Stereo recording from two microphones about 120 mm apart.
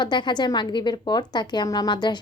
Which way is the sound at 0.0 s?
40° left (ahead or behind).